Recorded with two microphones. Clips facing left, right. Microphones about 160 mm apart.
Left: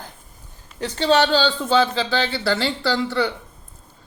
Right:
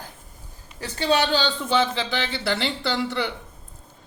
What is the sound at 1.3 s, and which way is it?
Speech, 20° right (ahead or behind).